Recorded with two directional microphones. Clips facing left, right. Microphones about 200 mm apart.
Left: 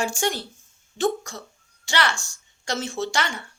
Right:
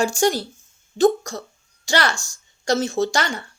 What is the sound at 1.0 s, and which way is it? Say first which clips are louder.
A woman's voice: right 7 dB; 40° right (ahead or behind).